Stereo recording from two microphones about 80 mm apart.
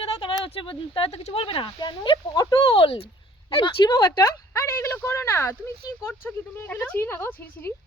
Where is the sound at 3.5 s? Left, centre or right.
Left.